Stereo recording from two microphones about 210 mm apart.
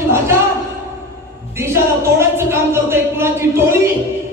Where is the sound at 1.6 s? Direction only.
10° right (ahead or behind).